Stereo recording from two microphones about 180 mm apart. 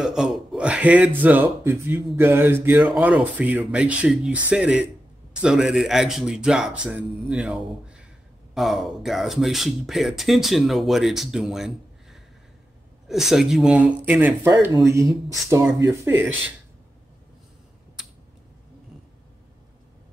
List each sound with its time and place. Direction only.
0.0 s speech: 5° right (ahead or behind)